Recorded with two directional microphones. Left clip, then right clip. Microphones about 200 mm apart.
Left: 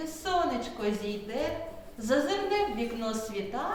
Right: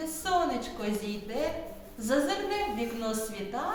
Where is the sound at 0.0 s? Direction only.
Centre (ahead or behind).